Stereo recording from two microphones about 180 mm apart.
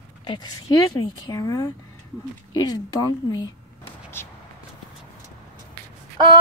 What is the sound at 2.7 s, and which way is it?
Speech, 20° left (ahead or behind).